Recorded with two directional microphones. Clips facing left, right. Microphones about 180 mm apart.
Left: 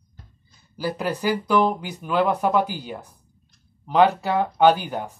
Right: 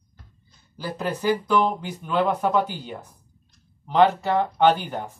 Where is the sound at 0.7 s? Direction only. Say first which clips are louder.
Left 3 dB; 10° left (ahead or behind).